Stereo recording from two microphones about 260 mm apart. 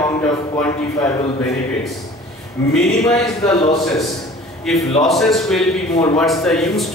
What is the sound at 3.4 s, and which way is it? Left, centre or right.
Speech, centre.